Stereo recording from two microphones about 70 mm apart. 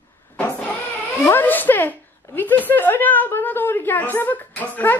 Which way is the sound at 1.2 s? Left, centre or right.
Left.